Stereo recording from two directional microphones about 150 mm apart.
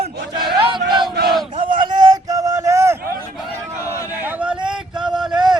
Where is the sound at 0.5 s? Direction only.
30° right (ahead or behind).